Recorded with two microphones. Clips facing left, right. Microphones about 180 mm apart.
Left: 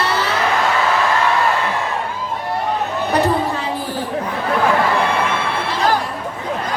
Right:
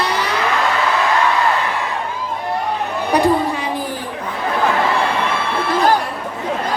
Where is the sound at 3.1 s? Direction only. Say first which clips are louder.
Right 2 dB; 15° right (ahead or behind).